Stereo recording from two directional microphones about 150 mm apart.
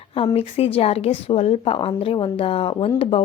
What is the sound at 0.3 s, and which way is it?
Speech, 40° left (ahead or behind).